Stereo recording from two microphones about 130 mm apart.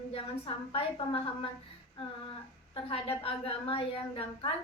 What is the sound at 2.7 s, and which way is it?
A woman's voice, 45° left (ahead or behind).